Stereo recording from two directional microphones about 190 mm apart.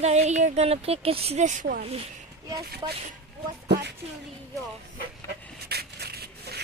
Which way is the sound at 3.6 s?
60° right (ahead or behind).